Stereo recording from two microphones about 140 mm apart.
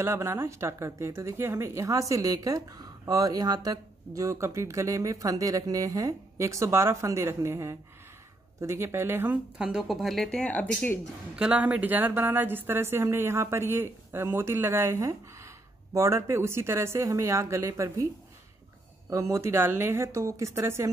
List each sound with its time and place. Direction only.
0.0 s speech: 20° right (ahead or behind); by 11.0 s 10° left (ahead or behind)
11.3 s speech: 5° right (ahead or behind)
19.0 s speech: 20° right (ahead or behind)